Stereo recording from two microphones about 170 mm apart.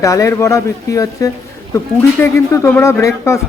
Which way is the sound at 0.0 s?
20° left (ahead or behind).